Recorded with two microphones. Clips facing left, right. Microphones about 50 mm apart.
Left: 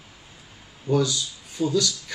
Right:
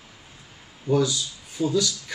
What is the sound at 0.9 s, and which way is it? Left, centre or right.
Speech, left.